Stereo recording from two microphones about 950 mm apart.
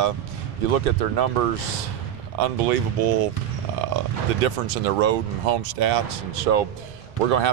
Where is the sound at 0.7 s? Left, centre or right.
Right.